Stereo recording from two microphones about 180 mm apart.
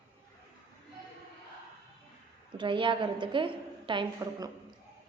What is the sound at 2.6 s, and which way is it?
A woman's voice, 25° right (ahead or behind).